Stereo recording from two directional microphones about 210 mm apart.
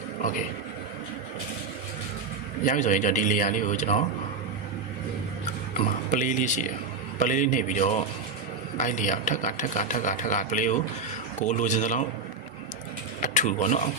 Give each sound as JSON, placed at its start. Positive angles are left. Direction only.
{"t": 2.6, "sound": "speech", "side_deg": 35}
{"t": 6.1, "sound": "speech", "side_deg": 35}
{"t": 13.2, "sound": "speech", "side_deg": 35}